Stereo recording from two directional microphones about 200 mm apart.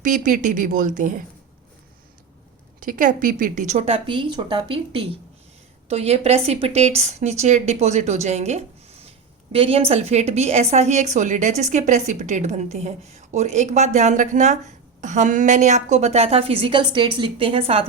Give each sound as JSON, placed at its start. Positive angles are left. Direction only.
{"t": 0.0, "sound": "a woman's voice", "side_deg": -40}
{"t": 2.8, "sound": "a woman's voice", "side_deg": -40}